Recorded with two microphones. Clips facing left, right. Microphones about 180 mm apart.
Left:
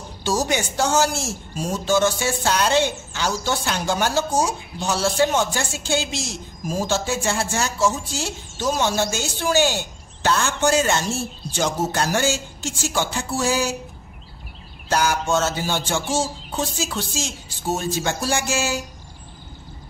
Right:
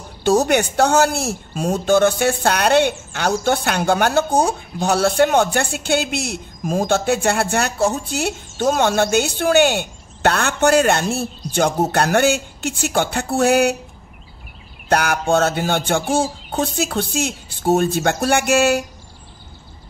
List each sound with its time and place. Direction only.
0.2 s a man's voice: 60° right (ahead or behind)
14.9 s a man's voice: 60° right (ahead or behind)